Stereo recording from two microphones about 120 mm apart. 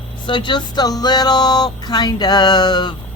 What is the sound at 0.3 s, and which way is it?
Speech, 40° left (ahead or behind).